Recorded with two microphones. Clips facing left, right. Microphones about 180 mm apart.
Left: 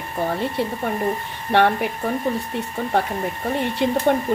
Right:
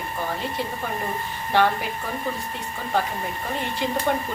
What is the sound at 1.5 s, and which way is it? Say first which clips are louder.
Speech: left 4 dB; 65° left (ahead or behind).